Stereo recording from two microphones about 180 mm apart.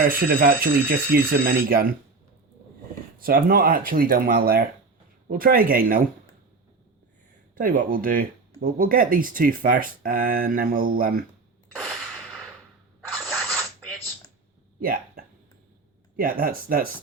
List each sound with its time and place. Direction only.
0.0 s speech: 55° right (ahead or behind)
3.2 s speech: 55° right (ahead or behind)
7.5 s speech: 50° right (ahead or behind)
13.2 s filing: centre (ahead or behind)
14.8 s hiccup: 55° right (ahead or behind)
16.1 s speech: 50° right (ahead or behind)